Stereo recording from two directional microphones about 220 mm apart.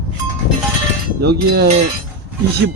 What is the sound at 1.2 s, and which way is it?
Speech, 50° right (ahead or behind).